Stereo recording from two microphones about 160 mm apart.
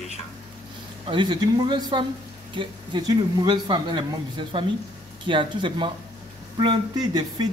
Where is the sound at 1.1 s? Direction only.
30° right (ahead or behind).